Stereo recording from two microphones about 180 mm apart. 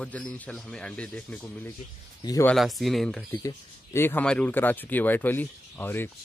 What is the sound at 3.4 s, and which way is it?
Speech, 15° left (ahead or behind).